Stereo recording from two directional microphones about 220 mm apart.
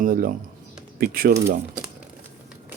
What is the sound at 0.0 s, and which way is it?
Speech, 40° right (ahead or behind).